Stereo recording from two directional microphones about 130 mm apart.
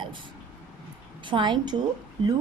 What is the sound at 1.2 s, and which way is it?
Speech, 40° right (ahead or behind).